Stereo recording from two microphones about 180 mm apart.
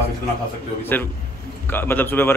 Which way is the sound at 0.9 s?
10° left (ahead or behind).